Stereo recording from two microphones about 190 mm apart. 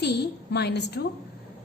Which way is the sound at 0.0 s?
60° left (ahead or behind).